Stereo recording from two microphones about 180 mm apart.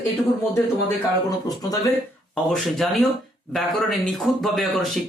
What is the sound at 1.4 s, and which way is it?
Speech, 20° left (ahead or behind).